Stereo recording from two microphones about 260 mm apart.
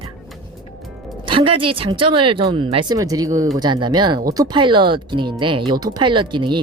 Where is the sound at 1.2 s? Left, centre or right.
Centre.